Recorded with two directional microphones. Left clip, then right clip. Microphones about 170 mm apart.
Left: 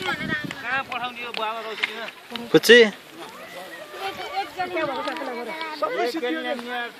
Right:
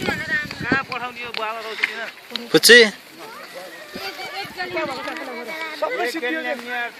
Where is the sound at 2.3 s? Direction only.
Centre (ahead or behind).